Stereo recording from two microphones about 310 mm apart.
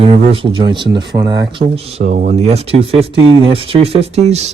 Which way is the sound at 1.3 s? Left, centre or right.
Centre.